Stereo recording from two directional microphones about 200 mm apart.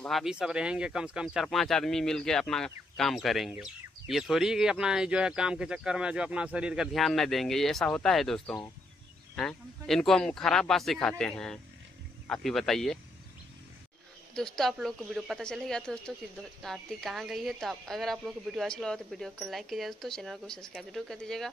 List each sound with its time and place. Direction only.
0.0 s speech: centre (ahead or behind)
14.3 s speech: centre (ahead or behind)